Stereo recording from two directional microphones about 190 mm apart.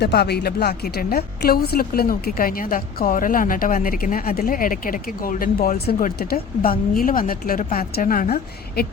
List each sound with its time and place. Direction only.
0.0 s speech: 60° left (ahead or behind)